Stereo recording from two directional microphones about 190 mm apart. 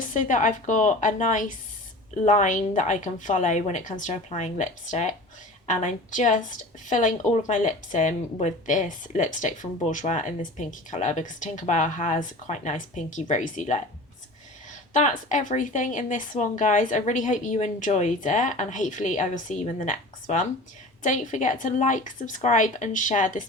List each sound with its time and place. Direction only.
0.0 s speech: 40° left (ahead or behind)
14.9 s speech: 40° left (ahead or behind)